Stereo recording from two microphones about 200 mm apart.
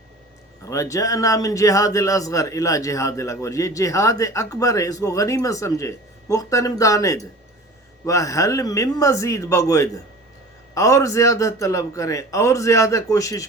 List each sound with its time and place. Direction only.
0.6 s a man's voice: 15° left (ahead or behind)